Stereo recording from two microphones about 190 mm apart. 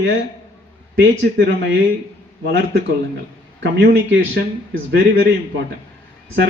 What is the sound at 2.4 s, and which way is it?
Speech, 65° right (ahead or behind).